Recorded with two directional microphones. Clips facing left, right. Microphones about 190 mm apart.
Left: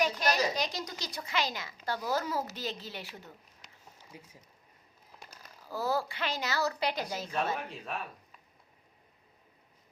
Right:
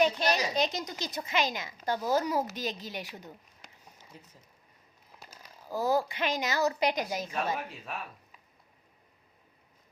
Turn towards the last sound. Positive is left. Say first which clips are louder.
# left 1 dB
turn(degrees=0)  # may be behind; listen again after turning